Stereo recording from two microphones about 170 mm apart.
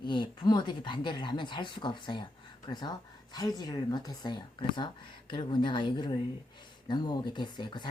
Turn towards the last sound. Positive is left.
turn(degrees=25)  # may be behind; listen again after turning